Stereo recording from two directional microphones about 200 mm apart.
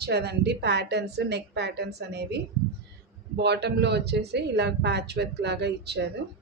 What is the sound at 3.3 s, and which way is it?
Speech, 55° right (ahead or behind).